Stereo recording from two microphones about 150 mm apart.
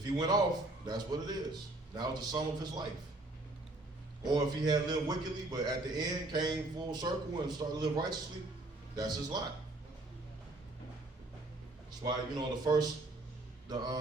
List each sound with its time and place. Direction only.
0.2 s a man's voice: 25° right (ahead or behind)
4.2 s a man's voice: 30° right (ahead or behind)
11.9 s a man's voice: 30° right (ahead or behind)